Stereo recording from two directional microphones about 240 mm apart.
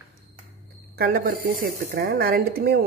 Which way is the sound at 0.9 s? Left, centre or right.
Right.